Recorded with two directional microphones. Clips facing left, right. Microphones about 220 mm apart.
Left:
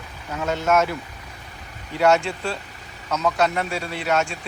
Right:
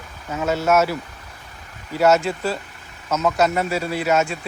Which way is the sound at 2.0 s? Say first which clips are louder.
Right 2 dB; 5° right (ahead or behind).